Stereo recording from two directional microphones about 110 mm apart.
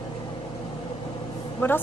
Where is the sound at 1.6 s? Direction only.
20° left (ahead or behind).